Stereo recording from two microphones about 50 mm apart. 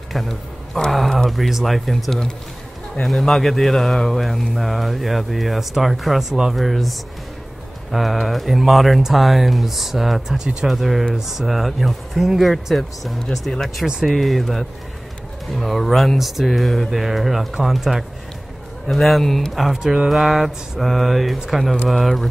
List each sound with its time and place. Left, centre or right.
0.1 s speech: centre